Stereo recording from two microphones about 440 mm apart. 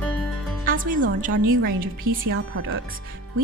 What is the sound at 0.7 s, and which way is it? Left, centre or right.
A woman's voice, centre.